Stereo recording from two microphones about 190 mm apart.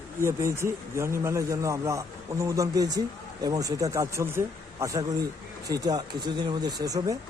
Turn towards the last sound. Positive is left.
turn(degrees=-20)  # may be behind; listen again after turning